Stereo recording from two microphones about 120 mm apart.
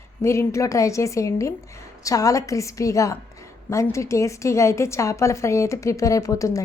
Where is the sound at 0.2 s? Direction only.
25° left (ahead or behind).